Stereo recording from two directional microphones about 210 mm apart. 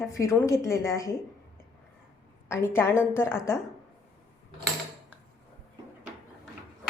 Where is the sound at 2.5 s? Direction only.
10° left (ahead or behind).